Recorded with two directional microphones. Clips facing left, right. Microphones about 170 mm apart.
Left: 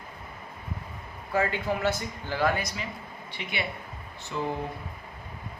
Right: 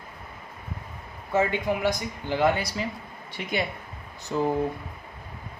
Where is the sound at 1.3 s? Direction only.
20° right (ahead or behind).